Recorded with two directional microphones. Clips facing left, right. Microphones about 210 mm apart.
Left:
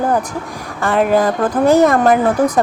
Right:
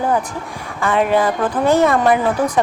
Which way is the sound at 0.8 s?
40° left (ahead or behind).